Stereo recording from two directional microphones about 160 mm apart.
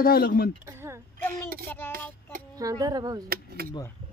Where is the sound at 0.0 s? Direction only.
70° left (ahead or behind).